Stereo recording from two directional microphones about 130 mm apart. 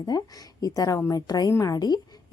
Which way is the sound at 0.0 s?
30° left (ahead or behind).